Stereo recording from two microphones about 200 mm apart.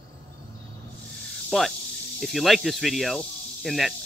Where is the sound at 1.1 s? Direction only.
Centre (ahead or behind).